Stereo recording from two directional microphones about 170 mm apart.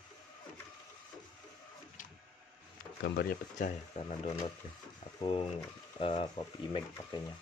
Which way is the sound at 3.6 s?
45° left (ahead or behind).